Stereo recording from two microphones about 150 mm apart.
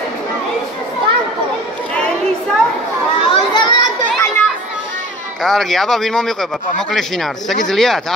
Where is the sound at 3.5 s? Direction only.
30° left (ahead or behind).